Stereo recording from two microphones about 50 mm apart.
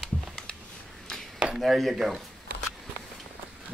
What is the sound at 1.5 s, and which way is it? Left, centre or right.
Speech, centre.